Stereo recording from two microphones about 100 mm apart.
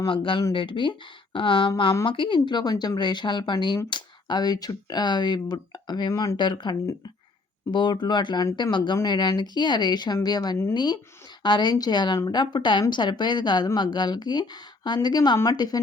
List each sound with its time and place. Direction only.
0.1 s a woman's voice: 60° left (ahead or behind); by 15.8 s 40° left (ahead or behind)